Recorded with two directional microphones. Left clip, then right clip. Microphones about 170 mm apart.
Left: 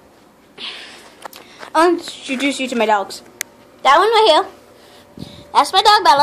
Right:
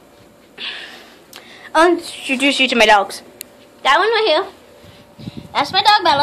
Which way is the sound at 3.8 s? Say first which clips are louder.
Left 3 dB; 50° left (ahead or behind).